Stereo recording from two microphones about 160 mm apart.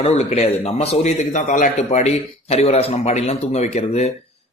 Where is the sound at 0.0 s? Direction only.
40° left (ahead or behind).